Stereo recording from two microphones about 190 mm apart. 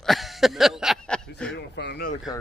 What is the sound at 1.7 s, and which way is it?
Speech, 60° left (ahead or behind).